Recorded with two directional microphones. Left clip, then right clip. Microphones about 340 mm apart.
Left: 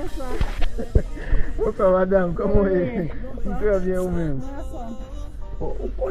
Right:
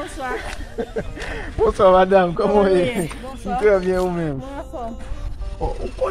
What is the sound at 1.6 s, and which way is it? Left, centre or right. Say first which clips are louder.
A man's voice: right 5 dB; centre.